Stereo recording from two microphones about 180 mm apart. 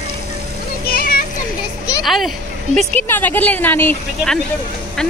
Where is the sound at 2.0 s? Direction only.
Centre (ahead or behind).